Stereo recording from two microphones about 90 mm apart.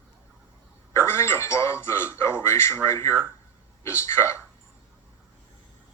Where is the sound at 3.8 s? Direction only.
30° left (ahead or behind).